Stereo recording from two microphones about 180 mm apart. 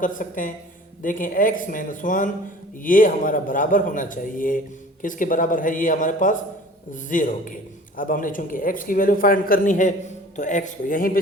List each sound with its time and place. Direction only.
0.0 s a man's voice: 50° left (ahead or behind)